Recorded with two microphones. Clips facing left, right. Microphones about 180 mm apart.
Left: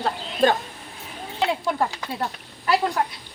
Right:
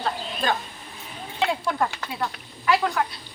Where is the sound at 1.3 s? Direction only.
25° left (ahead or behind).